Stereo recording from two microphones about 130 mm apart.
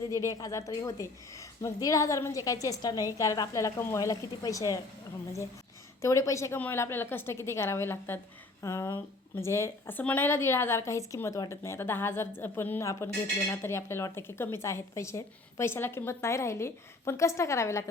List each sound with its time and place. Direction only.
0.1 s a woman's voice: 25° left (ahead or behind)
6.0 s a woman's voice: 25° left (ahead or behind)